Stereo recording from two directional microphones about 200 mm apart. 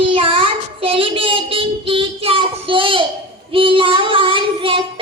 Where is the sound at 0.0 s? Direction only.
25° right (ahead or behind).